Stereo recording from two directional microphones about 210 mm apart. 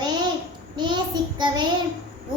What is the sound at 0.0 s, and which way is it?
Babbling, 20° right (ahead or behind).